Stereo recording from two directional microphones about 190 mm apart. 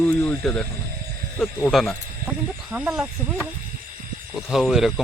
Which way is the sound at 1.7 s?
Centre (ahead or behind).